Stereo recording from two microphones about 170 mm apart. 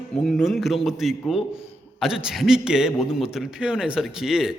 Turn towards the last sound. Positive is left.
turn(degrees=0)  # may be behind; listen again after turning